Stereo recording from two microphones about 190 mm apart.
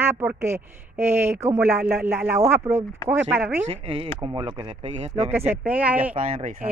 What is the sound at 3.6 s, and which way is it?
Speech, 30° right (ahead or behind).